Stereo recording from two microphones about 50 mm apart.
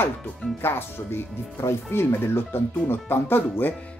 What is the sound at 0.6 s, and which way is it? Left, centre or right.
Speech, left.